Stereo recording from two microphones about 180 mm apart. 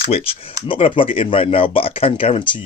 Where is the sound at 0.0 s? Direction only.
30° left (ahead or behind).